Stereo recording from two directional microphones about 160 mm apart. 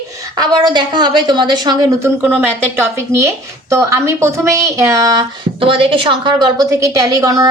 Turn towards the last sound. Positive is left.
turn(degrees=-20)  # may be behind; listen again after turning